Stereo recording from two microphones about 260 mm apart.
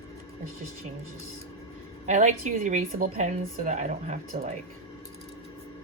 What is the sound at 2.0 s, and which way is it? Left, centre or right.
A woman's voice, right.